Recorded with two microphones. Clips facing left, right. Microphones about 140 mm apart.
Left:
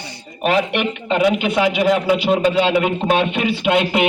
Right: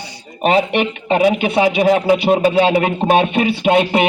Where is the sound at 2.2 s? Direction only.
50° right (ahead or behind).